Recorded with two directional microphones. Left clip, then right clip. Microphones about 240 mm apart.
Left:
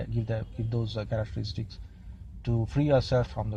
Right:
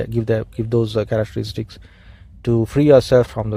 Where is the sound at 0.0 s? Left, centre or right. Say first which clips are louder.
Right 15 dB; right.